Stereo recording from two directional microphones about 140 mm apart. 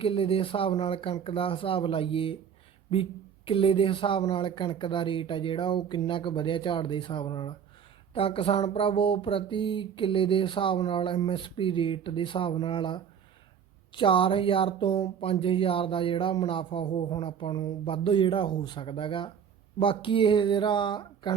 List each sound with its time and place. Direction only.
0.0 s speech: 40° left (ahead or behind)